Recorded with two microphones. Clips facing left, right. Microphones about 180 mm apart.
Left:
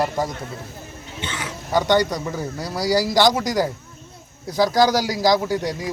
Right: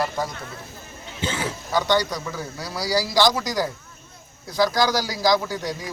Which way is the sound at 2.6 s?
45° left (ahead or behind).